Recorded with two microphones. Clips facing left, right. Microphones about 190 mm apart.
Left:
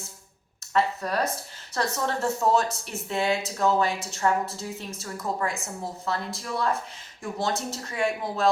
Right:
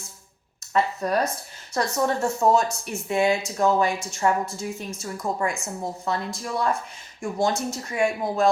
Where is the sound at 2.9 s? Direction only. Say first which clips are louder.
Right 5 dB; 15° right (ahead or behind).